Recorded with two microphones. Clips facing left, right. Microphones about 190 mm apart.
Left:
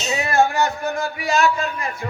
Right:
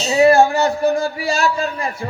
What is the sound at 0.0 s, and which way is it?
A man's voice, 30° right (ahead or behind).